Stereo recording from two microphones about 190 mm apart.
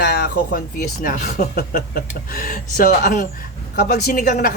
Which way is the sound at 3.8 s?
55° left (ahead or behind).